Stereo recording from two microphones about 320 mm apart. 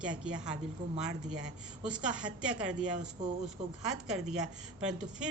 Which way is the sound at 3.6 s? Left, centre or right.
Centre.